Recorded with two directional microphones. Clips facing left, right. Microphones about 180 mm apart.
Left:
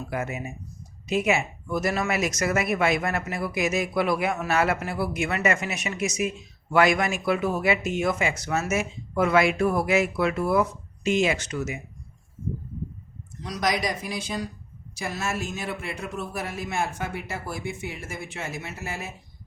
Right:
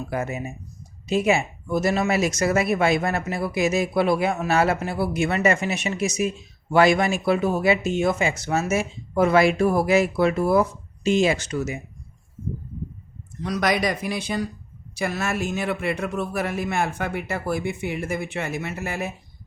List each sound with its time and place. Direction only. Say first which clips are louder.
0.1 s speech: right 2 dB; 30° right (ahead or behind)
13.4 s a man's voice: right 4 dB; 60° right (ahead or behind)